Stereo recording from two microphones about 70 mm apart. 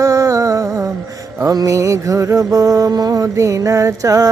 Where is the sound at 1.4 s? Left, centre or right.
Right.